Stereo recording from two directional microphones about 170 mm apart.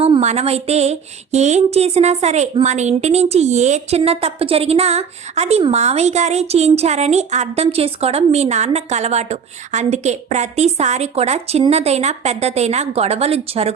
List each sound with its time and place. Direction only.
0.0 s speech: 40° right (ahead or behind)